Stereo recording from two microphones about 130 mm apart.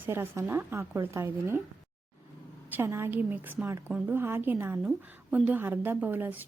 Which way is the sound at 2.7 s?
20° right (ahead or behind).